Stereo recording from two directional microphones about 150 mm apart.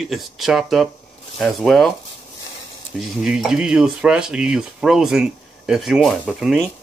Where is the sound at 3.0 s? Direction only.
5° right (ahead or behind).